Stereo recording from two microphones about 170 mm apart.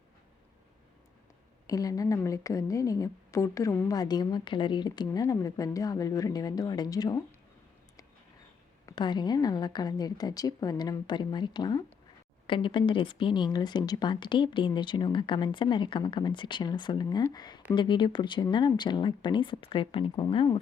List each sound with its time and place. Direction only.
1.6 s a woman's voice: 20° left (ahead or behind)
8.9 s a woman's voice: 25° left (ahead or behind)